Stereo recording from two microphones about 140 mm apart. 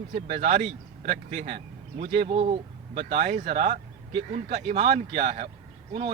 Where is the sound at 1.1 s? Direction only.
45° right (ahead or behind).